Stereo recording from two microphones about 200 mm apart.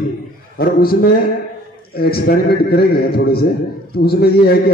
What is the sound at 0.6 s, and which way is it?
Speech, 50° left (ahead or behind).